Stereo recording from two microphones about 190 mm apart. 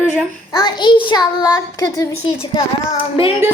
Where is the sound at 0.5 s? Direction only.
25° left (ahead or behind).